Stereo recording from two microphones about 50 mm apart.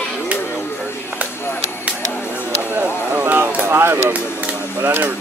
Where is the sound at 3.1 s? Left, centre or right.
Right.